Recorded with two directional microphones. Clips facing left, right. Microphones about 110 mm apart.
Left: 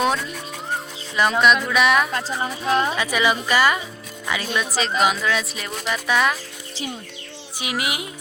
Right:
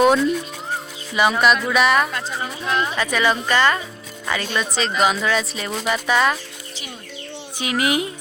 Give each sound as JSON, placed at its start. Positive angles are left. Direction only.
{"t": 0.0, "sound": "music", "side_deg": -5}
{"t": 1.1, "sound": "speech", "side_deg": -5}
{"t": 2.1, "sound": "speech", "side_deg": 35}
{"t": 3.0, "sound": "speech", "side_deg": 10}
{"t": 7.6, "sound": "speech", "side_deg": 10}